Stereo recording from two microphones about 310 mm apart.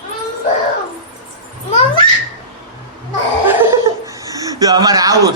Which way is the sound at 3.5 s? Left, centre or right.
Centre.